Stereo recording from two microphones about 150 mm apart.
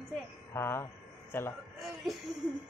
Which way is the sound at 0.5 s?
15° left (ahead or behind).